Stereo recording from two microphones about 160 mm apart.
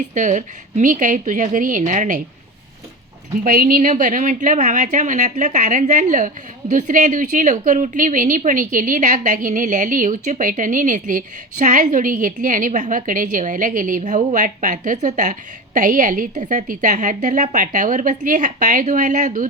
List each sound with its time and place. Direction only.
0.1 s a woman's voice: 50° right (ahead or behind)
3.4 s a woman's voice: 60° right (ahead or behind)